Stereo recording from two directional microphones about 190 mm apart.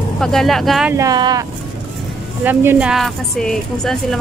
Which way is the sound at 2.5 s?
10° right (ahead or behind).